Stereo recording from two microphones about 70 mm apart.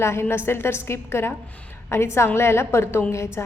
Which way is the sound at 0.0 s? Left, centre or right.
Left.